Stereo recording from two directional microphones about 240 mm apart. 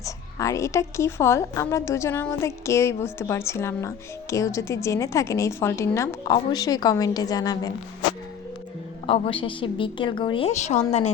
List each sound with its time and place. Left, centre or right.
0.0 s a woman's voice: centre
9.0 s a woman's voice: left